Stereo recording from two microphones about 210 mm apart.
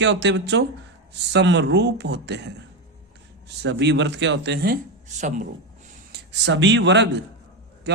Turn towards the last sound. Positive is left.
turn(degrees=-55)  # may be behind; listen again after turning